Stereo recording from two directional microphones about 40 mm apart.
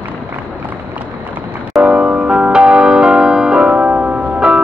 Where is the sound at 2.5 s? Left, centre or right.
Right.